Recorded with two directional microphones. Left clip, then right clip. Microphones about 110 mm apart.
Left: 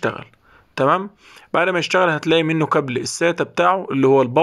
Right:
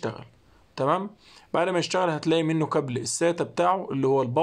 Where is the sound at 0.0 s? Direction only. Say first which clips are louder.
Left 10 dB; 35° left (ahead or behind).